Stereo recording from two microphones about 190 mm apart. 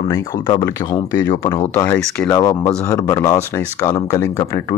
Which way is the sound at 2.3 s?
20° left (ahead or behind).